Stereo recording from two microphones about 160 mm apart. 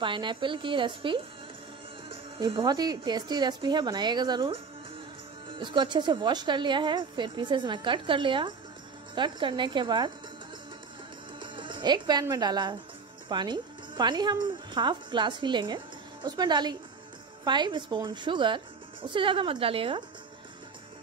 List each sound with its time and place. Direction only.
0.0 s a woman's voice: 30° right (ahead or behind)
5.6 s a woman's voice: 30° right (ahead or behind)
11.3 s a woman's voice: 30° right (ahead or behind)